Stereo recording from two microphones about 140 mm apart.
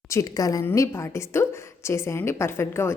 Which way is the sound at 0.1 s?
25° left (ahead or behind).